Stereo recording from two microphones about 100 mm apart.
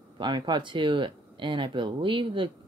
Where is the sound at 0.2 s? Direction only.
50° right (ahead or behind).